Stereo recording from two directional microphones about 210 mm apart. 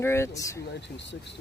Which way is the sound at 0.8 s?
55° left (ahead or behind).